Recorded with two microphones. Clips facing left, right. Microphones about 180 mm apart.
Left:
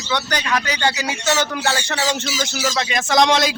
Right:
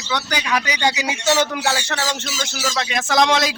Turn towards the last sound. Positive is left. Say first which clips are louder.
# left 1 dB
turn(degrees=0)  # may be behind; listen again after turning